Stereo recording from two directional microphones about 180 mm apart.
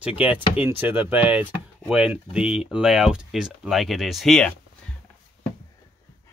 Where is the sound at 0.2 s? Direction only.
10° right (ahead or behind).